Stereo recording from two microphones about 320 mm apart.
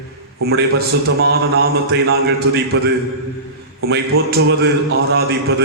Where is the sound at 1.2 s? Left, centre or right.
Right.